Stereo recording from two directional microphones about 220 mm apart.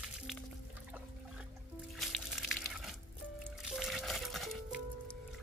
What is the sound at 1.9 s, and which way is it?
Music, centre (ahead or behind).